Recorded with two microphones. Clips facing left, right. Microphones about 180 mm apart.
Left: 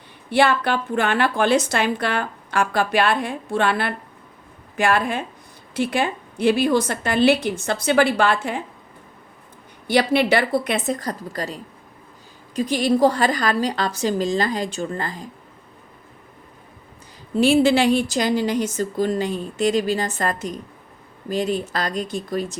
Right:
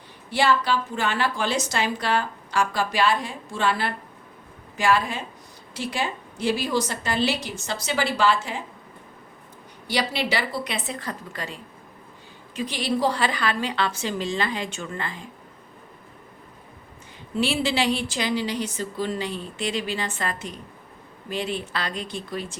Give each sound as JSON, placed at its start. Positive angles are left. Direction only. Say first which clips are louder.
{"t": 0.3, "sound": "a woman's voice", "louder": "left 3 dB", "side_deg": 60}
{"t": 9.8, "sound": "a woman's voice", "louder": "left 8 dB", "side_deg": 55}
{"t": 17.3, "sound": "a woman's voice", "louder": "left 8 dB", "side_deg": 45}